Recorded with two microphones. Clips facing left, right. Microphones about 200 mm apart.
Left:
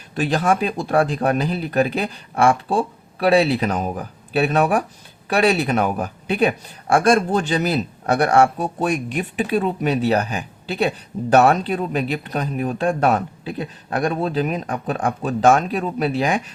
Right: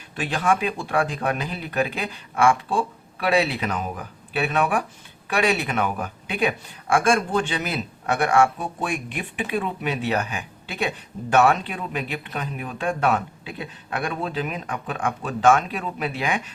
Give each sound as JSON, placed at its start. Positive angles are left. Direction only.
{"t": 0.2, "sound": "a man's voice", "side_deg": 40}